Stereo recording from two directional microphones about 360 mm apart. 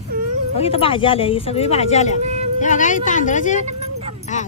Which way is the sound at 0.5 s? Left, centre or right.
Centre.